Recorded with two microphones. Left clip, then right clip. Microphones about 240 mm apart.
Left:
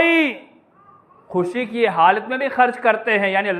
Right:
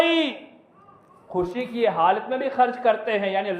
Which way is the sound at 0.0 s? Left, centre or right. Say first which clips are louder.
Left 4 dB; left.